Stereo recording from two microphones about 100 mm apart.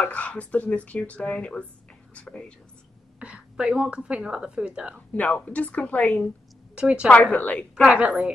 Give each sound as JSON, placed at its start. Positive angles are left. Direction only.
{"t": 0.0, "sound": "speech", "side_deg": 15}
{"t": 3.2, "sound": "a woman's voice", "side_deg": -10}
{"t": 5.1, "sound": "speech", "side_deg": 15}
{"t": 6.7, "sound": "a woman's voice", "side_deg": -10}
{"t": 7.1, "sound": "speech", "side_deg": 15}
{"t": 7.9, "sound": "a woman's voice", "side_deg": -15}